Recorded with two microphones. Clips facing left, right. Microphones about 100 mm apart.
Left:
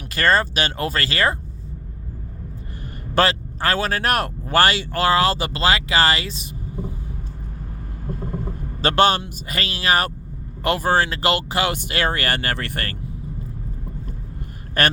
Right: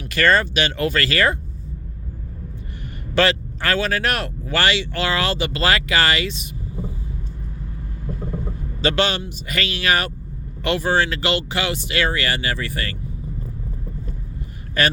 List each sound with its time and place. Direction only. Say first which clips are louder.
0.1 s speech: right 1 dB; 35° left (ahead or behind)
3.2 s speech: even; 35° left (ahead or behind)
8.8 s speech: left 3 dB; 45° left (ahead or behind)
14.8 s speech: even; 50° left (ahead or behind)